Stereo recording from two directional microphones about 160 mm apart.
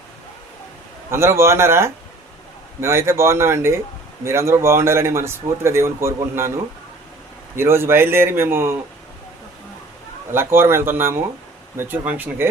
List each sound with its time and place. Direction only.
1.1 s speech: 15° right (ahead or behind)
7.5 s speech: 15° right (ahead or behind)
10.3 s speech: 15° right (ahead or behind)